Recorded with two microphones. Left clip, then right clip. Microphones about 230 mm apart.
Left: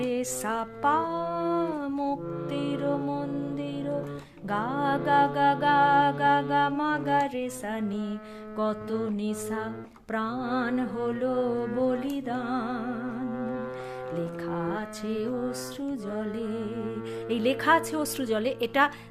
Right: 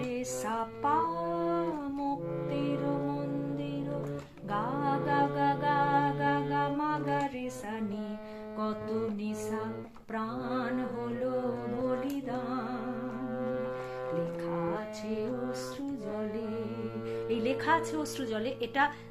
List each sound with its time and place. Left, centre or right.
0.0 s music: left
4.5 s music: left
10.1 s mantra: left
11.9 s music: left
17.2 s a woman's voice: left